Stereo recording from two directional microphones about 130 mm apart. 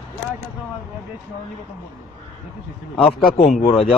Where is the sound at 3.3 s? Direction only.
50° left (ahead or behind).